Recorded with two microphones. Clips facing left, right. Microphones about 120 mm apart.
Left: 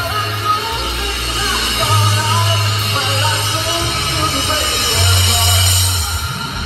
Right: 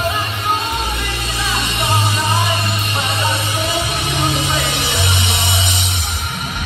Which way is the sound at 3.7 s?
70° left (ahead or behind).